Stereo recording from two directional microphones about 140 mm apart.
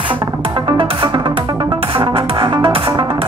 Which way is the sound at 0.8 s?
40° right (ahead or behind).